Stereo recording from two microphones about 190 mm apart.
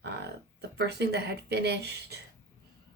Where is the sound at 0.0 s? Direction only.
60° right (ahead or behind).